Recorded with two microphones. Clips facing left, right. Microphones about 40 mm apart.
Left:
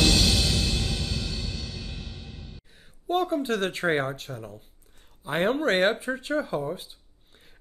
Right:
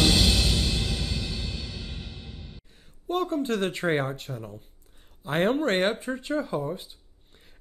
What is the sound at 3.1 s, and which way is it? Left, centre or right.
Speech, centre.